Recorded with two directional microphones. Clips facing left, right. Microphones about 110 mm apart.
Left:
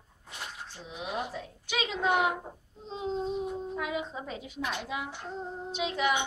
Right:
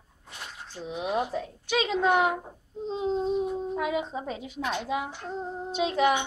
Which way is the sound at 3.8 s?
50° right (ahead or behind).